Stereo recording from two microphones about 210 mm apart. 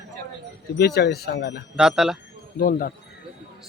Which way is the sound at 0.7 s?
50° left (ahead or behind).